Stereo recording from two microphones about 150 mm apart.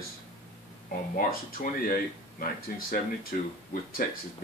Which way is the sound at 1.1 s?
70° left (ahead or behind).